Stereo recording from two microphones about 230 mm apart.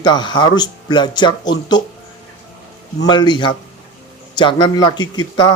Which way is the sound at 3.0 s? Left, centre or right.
Centre.